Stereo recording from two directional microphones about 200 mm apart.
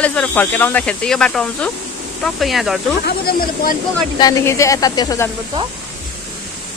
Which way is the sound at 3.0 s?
50° left (ahead or behind).